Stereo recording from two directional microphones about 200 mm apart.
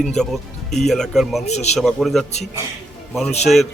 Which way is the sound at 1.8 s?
Centre (ahead or behind).